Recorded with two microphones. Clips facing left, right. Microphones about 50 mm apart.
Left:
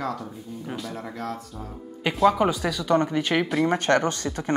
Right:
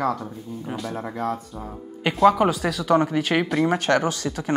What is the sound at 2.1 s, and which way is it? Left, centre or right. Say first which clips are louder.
Speech: right 3 dB; centre.